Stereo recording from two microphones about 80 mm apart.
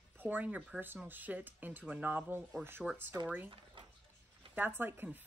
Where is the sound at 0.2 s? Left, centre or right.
Right.